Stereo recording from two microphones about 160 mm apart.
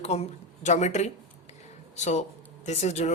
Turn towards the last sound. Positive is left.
turn(degrees=45)  # may be behind; listen again after turning